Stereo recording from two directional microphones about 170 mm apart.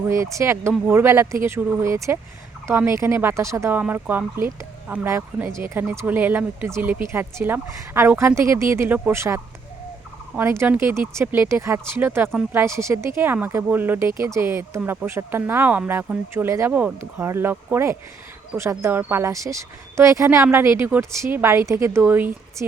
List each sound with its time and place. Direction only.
0.0 s speech: 15° right (ahead or behind)